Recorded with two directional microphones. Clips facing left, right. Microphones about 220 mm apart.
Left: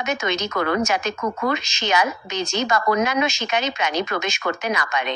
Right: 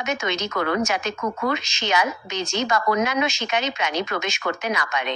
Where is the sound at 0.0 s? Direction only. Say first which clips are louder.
Left 2 dB; 45° left (ahead or behind).